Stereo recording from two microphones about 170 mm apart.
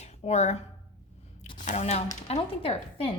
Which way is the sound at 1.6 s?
40° left (ahead or behind).